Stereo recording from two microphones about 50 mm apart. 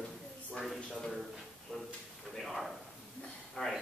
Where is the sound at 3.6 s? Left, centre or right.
Centre.